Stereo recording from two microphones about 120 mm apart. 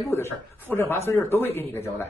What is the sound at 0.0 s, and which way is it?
A man's voice, 25° left (ahead or behind).